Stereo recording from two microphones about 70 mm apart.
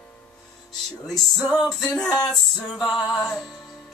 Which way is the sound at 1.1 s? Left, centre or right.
Centre.